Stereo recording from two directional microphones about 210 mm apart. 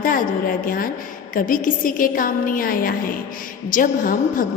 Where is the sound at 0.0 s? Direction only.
40° left (ahead or behind).